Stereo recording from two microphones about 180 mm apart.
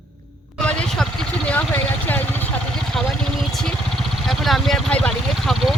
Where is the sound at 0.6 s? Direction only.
5° left (ahead or behind).